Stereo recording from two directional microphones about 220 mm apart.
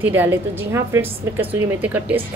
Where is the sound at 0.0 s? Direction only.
10° right (ahead or behind).